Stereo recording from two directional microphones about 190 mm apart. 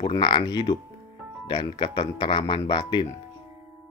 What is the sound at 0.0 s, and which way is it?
Speech, 25° left (ahead or behind).